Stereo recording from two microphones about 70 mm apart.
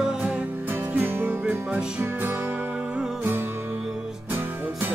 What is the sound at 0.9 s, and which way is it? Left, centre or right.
Music, right.